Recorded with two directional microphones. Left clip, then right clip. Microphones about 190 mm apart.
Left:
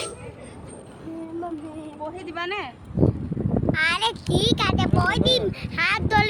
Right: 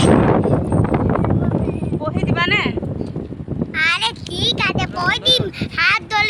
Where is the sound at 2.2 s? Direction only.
35° right (ahead or behind).